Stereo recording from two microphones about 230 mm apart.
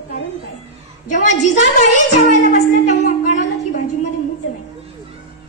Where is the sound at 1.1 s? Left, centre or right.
Left.